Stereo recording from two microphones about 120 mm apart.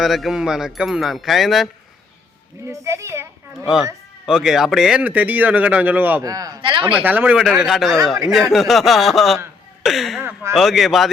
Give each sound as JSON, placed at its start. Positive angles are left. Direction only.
{"t": 0.0, "sound": "speech", "side_deg": 0}
{"t": 2.6, "sound": "a woman's voice", "side_deg": -25}
{"t": 4.3, "sound": "speech", "side_deg": -5}
{"t": 6.2, "sound": "speech", "side_deg": -30}
{"t": 6.6, "sound": "speech", "side_deg": -45}
{"t": 6.8, "sound": "speech", "side_deg": -15}
{"t": 7.6, "sound": "speech", "side_deg": 0}
{"t": 10.2, "sound": "speech", "side_deg": -20}
{"t": 10.5, "sound": "speech", "side_deg": 0}